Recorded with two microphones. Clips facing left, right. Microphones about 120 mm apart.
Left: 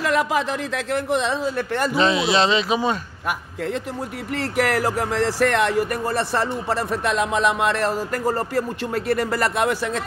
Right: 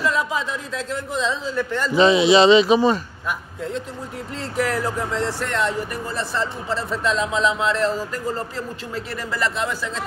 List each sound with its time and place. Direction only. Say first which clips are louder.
0.0 s speech: left 2 dB; 85° left; by 1.9 s 60° left (ahead or behind)
2.0 s speech: right 6 dB; centre (ahead or behind)
4.4 s speech: left 2 dB; 80° left; by 10.0 s 60° left (ahead or behind)